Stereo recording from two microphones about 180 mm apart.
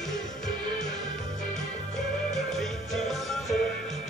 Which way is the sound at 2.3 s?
Centre (ahead or behind).